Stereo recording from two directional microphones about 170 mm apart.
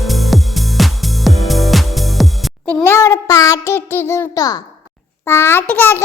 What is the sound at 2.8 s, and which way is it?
Child singing, 15° left (ahead or behind).